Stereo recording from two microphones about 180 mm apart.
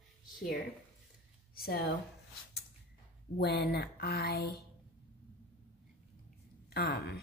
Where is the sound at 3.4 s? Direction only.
65° left (ahead or behind).